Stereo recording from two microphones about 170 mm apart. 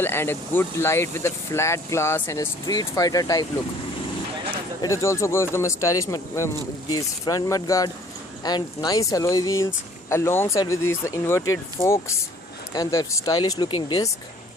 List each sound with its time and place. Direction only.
0.0 s speech: 15° left (ahead or behind)
4.8 s speech: 20° left (ahead or behind)